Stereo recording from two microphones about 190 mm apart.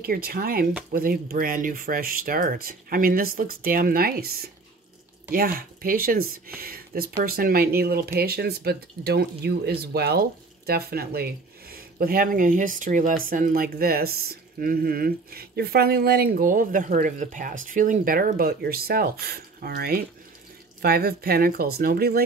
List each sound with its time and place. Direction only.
0.0 s speech: 50° right (ahead or behind)